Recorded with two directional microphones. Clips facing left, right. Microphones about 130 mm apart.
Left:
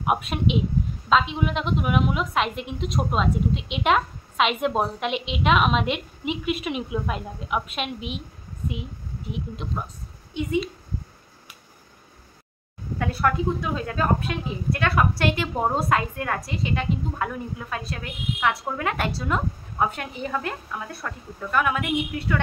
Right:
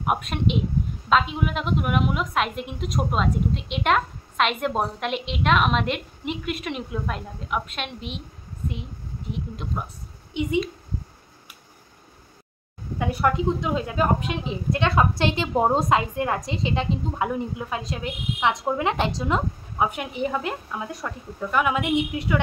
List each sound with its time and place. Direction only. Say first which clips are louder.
0.0 s a woman's voice: left 1 dB; centre (ahead or behind)
9.3 s a woman's voice: even; centre (ahead or behind)
10.3 s a woman's voice: right 2 dB; 20° right (ahead or behind)
13.0 s a woman's voice: right 1 dB; 20° right (ahead or behind)